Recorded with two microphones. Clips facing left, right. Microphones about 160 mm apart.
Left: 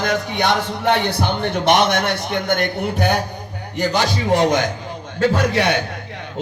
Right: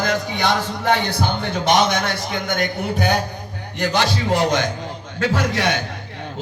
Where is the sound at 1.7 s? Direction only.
60° left (ahead or behind).